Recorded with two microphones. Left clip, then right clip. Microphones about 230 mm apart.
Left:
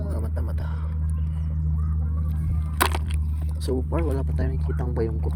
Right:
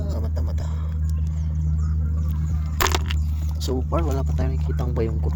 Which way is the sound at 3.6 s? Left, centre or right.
Centre.